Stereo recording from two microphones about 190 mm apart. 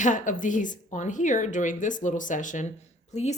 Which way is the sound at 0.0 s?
40° left (ahead or behind).